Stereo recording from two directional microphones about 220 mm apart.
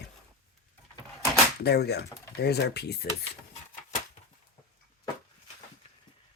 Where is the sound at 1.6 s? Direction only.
45° left (ahead or behind).